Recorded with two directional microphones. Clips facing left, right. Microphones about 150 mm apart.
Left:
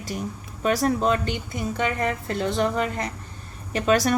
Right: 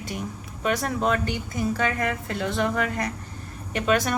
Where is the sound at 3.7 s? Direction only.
35° left (ahead or behind).